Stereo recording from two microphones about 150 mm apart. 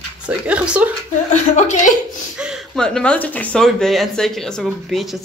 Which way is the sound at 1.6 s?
50° left (ahead or behind).